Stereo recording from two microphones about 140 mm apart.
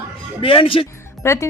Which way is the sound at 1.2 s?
20° left (ahead or behind).